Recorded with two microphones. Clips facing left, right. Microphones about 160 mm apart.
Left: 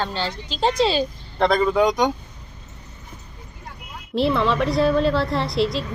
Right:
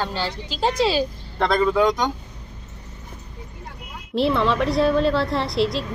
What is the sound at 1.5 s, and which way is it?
Speech, 15° left (ahead or behind).